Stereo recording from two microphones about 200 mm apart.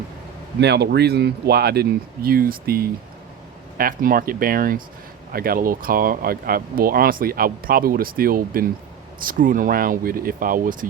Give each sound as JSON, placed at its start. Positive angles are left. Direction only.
{"t": 0.6, "sound": "speech", "side_deg": -55}